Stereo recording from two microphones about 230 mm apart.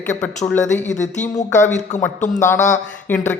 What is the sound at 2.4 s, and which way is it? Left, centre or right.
Speech, centre.